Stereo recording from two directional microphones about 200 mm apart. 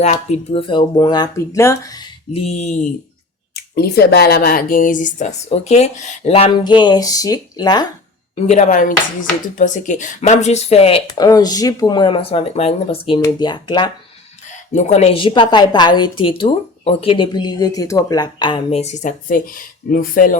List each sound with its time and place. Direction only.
0.0 s a woman's voice: 35° left (ahead or behind)
3.5 s speech: 50° left (ahead or behind); by 7.9 s 20° left (ahead or behind)
8.4 s a woman's voice: 35° left (ahead or behind)
14.7 s a woman's voice: 35° left (ahead or behind)